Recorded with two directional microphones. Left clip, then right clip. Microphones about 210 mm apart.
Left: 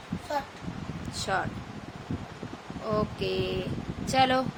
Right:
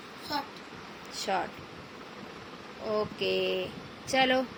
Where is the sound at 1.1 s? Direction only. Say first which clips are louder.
Left 1 dB; 10° left (ahead or behind).